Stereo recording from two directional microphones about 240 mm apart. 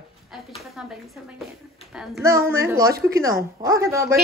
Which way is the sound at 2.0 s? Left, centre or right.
Centre.